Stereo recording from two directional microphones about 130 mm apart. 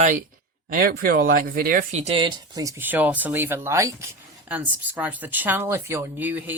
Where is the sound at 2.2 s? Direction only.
30° right (ahead or behind).